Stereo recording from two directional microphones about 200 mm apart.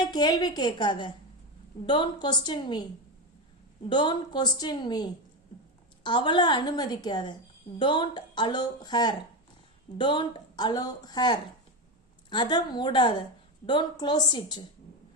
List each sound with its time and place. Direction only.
0.1 s a woman's voice: 20° left (ahead or behind)
3.8 s a woman's voice: 25° left (ahead or behind)